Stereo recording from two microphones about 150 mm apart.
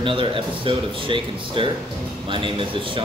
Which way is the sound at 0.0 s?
35° right (ahead or behind).